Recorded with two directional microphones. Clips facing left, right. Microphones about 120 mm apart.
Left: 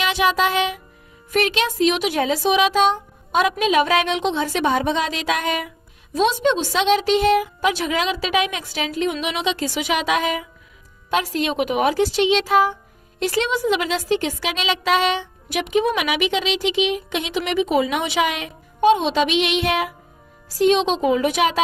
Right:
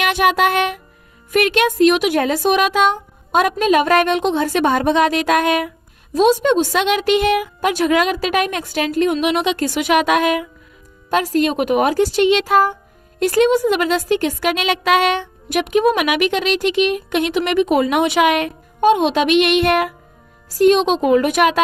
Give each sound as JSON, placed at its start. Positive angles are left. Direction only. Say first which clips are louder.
{"t": 0.0, "sound": "music", "louder": "right 4 dB", "side_deg": -55}
{"t": 1.3, "sound": "speech", "louder": "right 5 dB", "side_deg": -55}
{"t": 6.1, "sound": "speech", "louder": "right 5 dB", "side_deg": -50}
{"t": 11.1, "sound": "speech", "louder": "right 5 dB", "side_deg": -45}